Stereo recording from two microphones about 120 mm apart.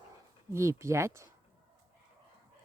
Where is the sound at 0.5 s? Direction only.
25° right (ahead or behind).